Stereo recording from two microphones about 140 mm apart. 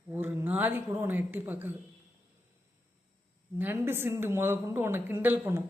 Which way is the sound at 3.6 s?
15° right (ahead or behind).